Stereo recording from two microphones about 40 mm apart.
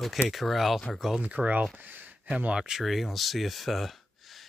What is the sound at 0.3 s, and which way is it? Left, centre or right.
Speech, centre.